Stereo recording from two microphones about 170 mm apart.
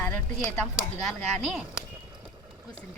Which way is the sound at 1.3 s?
Centre (ahead or behind).